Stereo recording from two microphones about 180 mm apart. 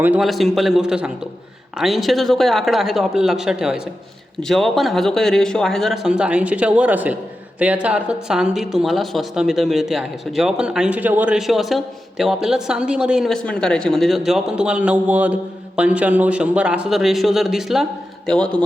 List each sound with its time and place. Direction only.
0.0 s speech: 5° right (ahead or behind)